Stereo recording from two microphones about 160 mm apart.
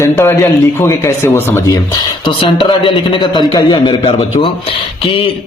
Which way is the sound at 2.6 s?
30° left (ahead or behind).